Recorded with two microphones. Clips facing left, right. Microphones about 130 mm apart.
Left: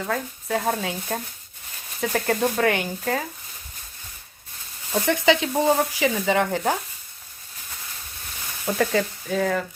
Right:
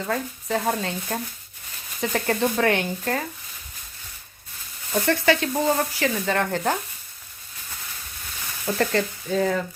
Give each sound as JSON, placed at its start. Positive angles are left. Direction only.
{"t": 0.0, "sound": "speech", "side_deg": 0}
{"t": 4.9, "sound": "speech", "side_deg": 15}
{"t": 8.8, "sound": "speech", "side_deg": 5}